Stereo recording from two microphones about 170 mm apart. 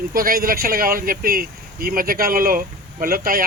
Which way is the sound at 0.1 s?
55° right (ahead or behind).